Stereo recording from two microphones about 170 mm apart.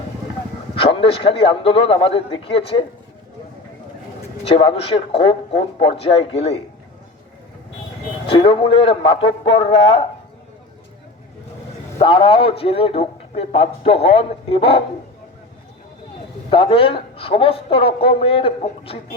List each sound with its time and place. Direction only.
0.8 s a man's voice: 30° left (ahead or behind)
4.4 s a man's voice: 35° left (ahead or behind)
8.3 s a man's voice: 35° left (ahead or behind)
11.9 s a man's voice: 30° left (ahead or behind)
16.5 s a man's voice: 30° left (ahead or behind)